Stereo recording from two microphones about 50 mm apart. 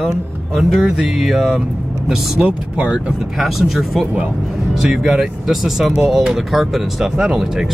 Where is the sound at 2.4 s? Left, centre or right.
Right.